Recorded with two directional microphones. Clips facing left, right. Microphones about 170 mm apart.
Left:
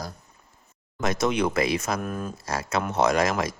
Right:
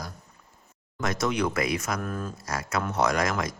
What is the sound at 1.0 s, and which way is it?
Speech, 25° left (ahead or behind).